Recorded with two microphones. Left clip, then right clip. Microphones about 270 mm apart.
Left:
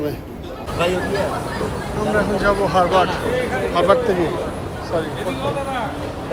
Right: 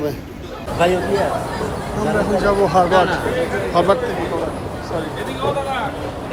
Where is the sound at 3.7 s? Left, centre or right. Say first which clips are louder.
Even; right.